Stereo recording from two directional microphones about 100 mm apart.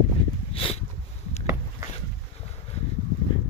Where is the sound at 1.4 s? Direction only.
30° right (ahead or behind).